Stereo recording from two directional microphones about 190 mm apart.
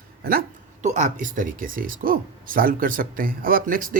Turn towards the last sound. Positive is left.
turn(degrees=-45)  # may be behind; listen again after turning